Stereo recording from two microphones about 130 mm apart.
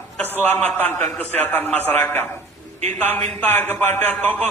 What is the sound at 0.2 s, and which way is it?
Speech, 15° left (ahead or behind).